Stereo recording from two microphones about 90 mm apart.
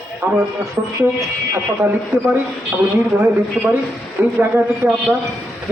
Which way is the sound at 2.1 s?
25° right (ahead or behind).